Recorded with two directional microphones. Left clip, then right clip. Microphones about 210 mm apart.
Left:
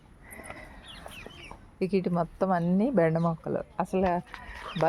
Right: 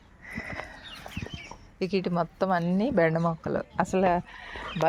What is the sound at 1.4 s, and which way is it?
Speech, 20° left (ahead or behind).